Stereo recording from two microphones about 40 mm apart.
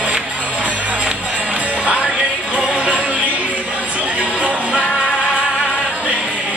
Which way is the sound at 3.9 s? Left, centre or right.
Right.